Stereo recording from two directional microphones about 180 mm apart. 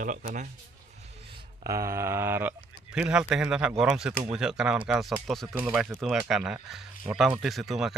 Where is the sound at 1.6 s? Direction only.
15° right (ahead or behind).